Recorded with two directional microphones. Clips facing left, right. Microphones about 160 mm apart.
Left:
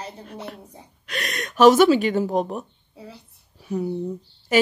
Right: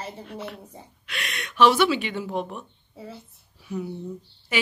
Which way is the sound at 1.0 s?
40° left (ahead or behind).